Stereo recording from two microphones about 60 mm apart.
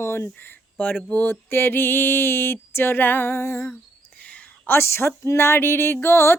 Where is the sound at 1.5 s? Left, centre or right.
Left.